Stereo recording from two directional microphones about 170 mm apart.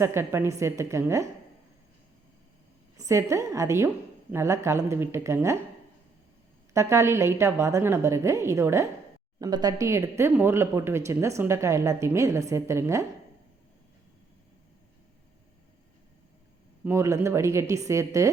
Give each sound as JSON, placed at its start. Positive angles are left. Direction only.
{"t": 0.0, "sound": "speech", "side_deg": -15}
{"t": 3.0, "sound": "speech", "side_deg": -20}
{"t": 6.7, "sound": "speech", "side_deg": -15}
{"t": 16.8, "sound": "speech", "side_deg": -15}